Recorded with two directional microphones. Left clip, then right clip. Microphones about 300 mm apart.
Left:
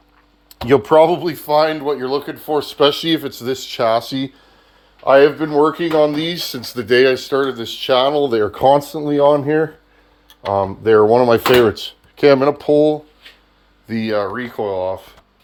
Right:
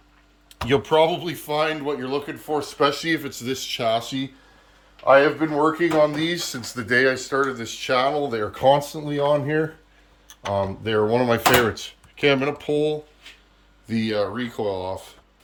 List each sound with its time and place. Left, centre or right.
0.9 s speech: centre
5.0 s speech: left
11.1 s speech: centre